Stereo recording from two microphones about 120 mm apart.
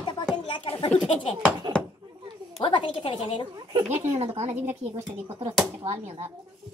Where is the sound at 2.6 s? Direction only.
45° left (ahead or behind).